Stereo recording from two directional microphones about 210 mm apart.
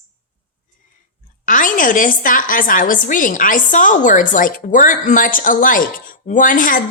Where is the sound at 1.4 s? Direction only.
40° left (ahead or behind).